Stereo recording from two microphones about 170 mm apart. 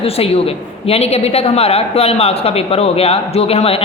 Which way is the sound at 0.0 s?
35° left (ahead or behind).